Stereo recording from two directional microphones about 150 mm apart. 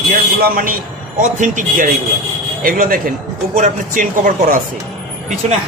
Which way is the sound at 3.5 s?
60° right (ahead or behind).